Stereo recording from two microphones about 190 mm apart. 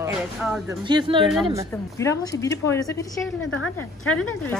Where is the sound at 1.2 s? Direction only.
Centre (ahead or behind).